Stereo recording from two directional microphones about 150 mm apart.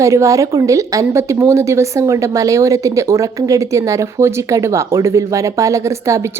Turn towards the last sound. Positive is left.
turn(degrees=-20)  # may be behind; listen again after turning